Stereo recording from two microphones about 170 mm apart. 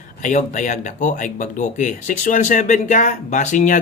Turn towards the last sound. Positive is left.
turn(degrees=45)  # may be behind; listen again after turning